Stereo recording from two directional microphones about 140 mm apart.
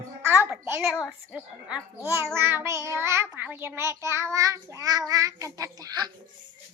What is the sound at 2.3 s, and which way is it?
A child's voice, 15° right (ahead or behind).